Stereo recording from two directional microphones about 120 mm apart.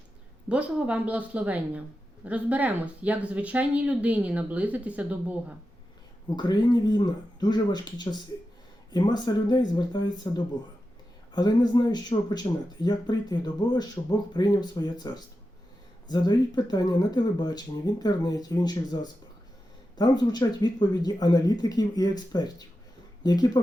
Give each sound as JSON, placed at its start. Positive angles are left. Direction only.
{"t": 0.4, "sound": "speech", "side_deg": -10}
{"t": 6.2, "sound": "speech", "side_deg": 35}